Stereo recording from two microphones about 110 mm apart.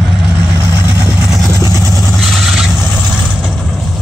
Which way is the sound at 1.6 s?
35° left (ahead or behind).